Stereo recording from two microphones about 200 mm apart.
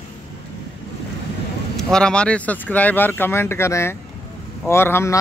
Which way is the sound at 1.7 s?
5° left (ahead or behind).